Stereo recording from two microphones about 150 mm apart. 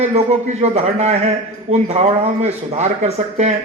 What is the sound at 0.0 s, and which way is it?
Speech, 50° right (ahead or behind).